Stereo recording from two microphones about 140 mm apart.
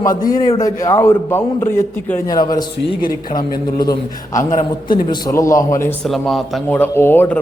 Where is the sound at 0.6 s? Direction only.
25° left (ahead or behind).